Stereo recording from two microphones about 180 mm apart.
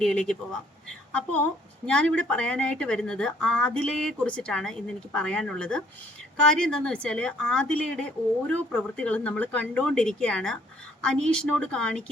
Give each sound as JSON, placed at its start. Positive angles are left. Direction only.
{"t": 0.0, "sound": "a woman's voice", "side_deg": 5}
{"t": 1.9, "sound": "a woman's voice", "side_deg": 5}